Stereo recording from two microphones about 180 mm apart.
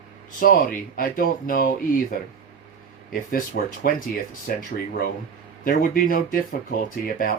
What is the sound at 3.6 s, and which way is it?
A man's voice, 60° left (ahead or behind).